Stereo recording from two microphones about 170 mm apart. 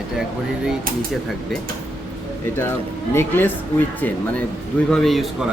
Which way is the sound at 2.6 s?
15° left (ahead or behind).